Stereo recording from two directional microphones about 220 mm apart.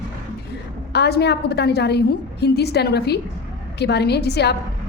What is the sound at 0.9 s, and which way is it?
A woman's voice, 50° left (ahead or behind).